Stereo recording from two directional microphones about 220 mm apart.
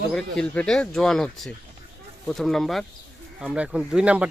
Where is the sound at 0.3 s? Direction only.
5° left (ahead or behind).